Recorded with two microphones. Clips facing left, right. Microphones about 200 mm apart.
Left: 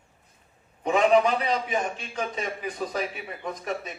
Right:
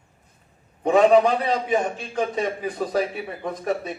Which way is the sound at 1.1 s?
50° right (ahead or behind).